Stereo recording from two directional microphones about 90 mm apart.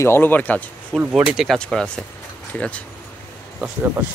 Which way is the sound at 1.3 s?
Centre (ahead or behind).